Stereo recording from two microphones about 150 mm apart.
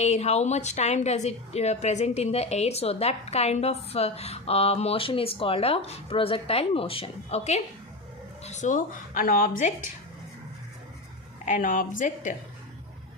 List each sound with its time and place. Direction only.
0.0 s a woman's voice: 45° left (ahead or behind); by 9.7 s 65° left (ahead or behind)
11.4 s a woman's voice: 60° left (ahead or behind)